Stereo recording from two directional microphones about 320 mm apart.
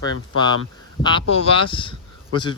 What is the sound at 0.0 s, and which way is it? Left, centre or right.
Speech, centre.